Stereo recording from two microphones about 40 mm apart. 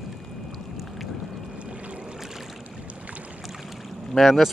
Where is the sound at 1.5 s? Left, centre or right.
Right.